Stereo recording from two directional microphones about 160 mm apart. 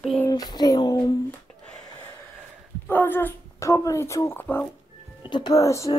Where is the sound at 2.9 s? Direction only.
10° left (ahead or behind).